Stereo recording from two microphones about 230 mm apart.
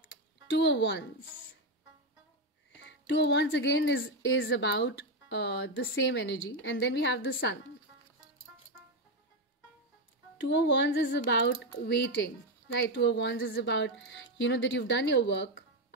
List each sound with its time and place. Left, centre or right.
0.5 s speech: left
2.8 s speech: left
10.4 s speech: left